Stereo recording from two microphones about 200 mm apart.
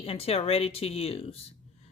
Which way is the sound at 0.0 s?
30° left (ahead or behind).